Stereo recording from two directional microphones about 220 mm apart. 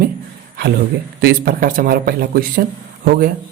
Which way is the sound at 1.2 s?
40° right (ahead or behind).